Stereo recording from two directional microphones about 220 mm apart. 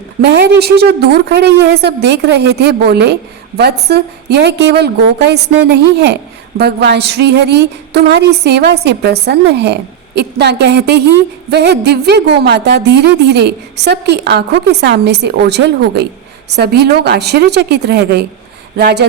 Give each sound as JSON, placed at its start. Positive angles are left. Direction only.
{"t": 0.2, "sound": "a woman's voice", "side_deg": -50}